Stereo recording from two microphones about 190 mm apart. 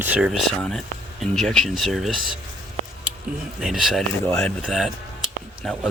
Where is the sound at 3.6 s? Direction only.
Centre (ahead or behind).